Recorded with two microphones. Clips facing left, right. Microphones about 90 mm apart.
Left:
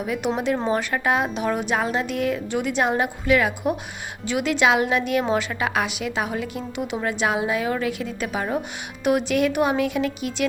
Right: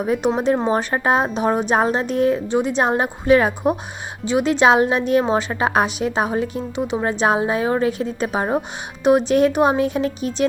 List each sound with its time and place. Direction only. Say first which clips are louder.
0.0 s a woman's voice: right 5 dB; 35° right (ahead or behind)